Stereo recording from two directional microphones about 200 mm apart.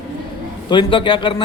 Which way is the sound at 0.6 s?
25° left (ahead or behind).